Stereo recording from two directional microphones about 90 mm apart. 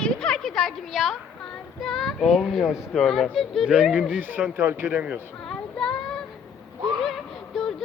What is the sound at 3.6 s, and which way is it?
Speech, 10° right (ahead or behind).